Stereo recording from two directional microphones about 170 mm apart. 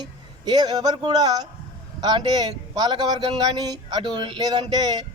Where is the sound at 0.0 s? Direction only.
25° right (ahead or behind).